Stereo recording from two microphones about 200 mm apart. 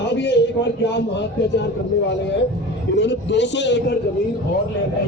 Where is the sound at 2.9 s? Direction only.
60° left (ahead or behind).